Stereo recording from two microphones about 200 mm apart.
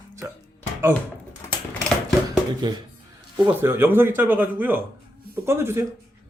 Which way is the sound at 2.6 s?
20° right (ahead or behind).